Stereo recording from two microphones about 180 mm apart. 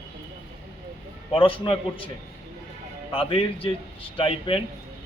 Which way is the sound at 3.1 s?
30° left (ahead or behind).